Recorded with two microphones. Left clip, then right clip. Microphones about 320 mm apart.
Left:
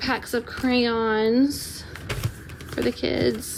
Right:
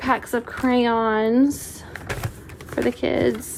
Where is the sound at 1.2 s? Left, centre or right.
Right.